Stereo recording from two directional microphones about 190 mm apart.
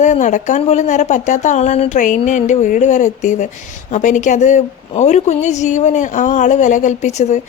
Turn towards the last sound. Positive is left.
turn(degrees=35)  # may be behind; listen again after turning